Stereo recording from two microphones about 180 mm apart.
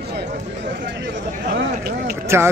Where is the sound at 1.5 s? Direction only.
55° right (ahead or behind).